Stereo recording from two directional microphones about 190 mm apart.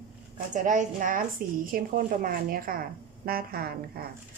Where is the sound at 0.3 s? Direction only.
40° right (ahead or behind).